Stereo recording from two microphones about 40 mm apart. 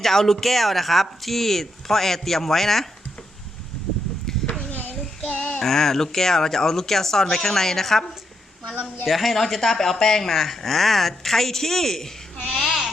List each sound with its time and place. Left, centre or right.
0.0 s speech: centre
4.3 s a sound: centre
4.7 s child singing: left
5.2 s child singing: left
5.6 s speech: centre
12.5 s a sound: centre